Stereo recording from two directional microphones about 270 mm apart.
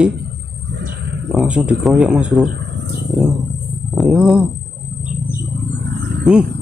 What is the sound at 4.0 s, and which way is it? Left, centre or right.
Speech, centre.